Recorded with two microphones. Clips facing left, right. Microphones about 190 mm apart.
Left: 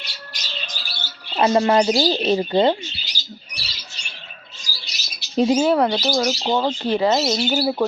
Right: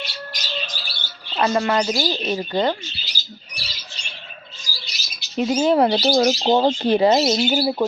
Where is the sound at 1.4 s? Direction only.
25° left (ahead or behind).